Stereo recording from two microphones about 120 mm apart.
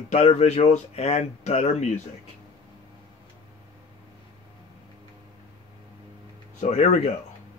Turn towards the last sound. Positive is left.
turn(degrees=70)  # may be behind; listen again after turning